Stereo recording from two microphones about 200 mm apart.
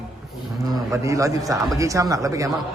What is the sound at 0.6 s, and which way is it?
A man's voice, 20° right (ahead or behind).